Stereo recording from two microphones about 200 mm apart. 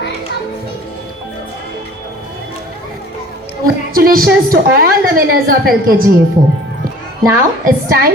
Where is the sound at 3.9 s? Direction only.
45° right (ahead or behind).